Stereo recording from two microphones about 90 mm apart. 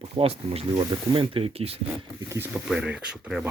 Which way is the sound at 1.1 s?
80° right.